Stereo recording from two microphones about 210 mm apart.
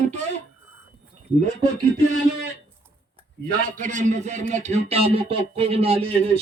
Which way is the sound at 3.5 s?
35° right (ahead or behind).